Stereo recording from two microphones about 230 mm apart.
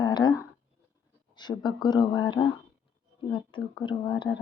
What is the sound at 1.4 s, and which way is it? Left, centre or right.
Speech, centre.